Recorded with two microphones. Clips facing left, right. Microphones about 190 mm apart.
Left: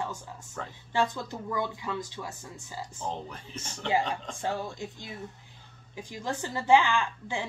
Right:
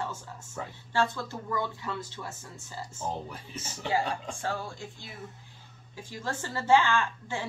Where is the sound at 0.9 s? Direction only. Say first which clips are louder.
Even; 15° left (ahead or behind).